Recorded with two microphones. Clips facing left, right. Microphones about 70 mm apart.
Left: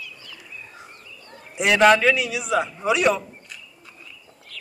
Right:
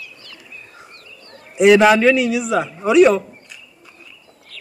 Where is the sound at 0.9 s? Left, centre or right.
Right.